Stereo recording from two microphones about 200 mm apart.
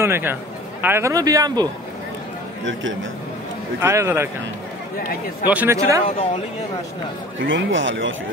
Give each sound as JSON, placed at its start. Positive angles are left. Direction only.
{"t": 0.0, "sound": "a man's voice", "side_deg": -10}
{"t": 2.6, "sound": "a man's voice", "side_deg": -70}
{"t": 3.8, "sound": "a man's voice", "side_deg": -10}
{"t": 5.5, "sound": "a man's voice", "side_deg": -10}
{"t": 7.4, "sound": "a man's voice", "side_deg": -70}